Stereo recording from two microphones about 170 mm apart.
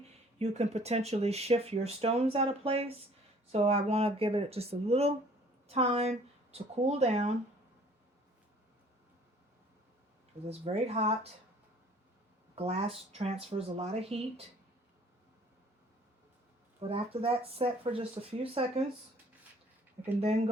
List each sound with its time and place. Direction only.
0.3 s speech: 40° right (ahead or behind)
10.4 s speech: 35° right (ahead or behind)
12.5 s speech: 35° right (ahead or behind)
16.9 s speech: 35° right (ahead or behind)
20.2 s speech: 40° right (ahead or behind)